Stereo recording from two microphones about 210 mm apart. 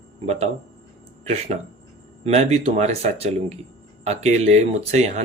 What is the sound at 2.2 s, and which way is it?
Speech, 30° right (ahead or behind).